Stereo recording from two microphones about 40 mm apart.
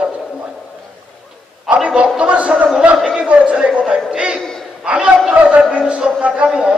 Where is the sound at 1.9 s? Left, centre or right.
Right.